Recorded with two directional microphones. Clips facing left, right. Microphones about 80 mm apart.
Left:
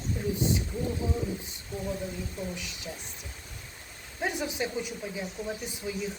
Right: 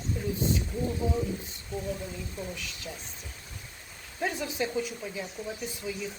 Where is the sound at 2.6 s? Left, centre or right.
Centre.